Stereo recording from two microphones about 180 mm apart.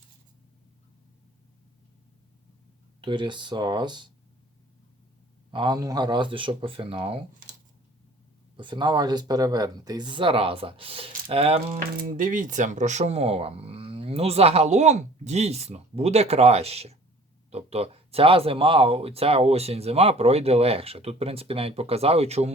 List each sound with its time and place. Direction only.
3.0 s speech: 25° right (ahead or behind)
5.5 s speech: 25° right (ahead or behind)
8.5 s speech: 25° right (ahead or behind)